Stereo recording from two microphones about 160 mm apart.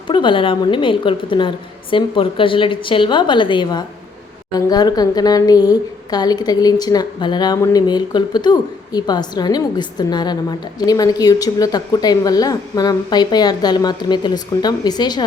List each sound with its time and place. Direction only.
0.1 s a woman's voice: 30° left (ahead or behind)